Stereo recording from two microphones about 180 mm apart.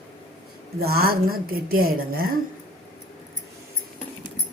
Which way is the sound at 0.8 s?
60° right (ahead or behind).